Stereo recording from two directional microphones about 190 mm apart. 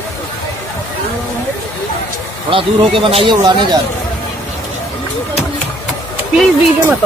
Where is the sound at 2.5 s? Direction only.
30° right (ahead or behind).